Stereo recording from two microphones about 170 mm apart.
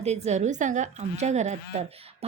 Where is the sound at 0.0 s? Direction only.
40° right (ahead or behind).